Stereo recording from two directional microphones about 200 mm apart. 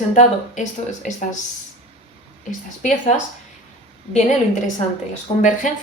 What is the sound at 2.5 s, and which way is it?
Speech, 40° left (ahead or behind).